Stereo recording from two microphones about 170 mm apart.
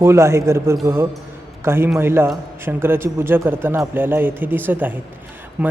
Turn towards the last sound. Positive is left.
turn(degrees=-10)  # may be behind; listen again after turning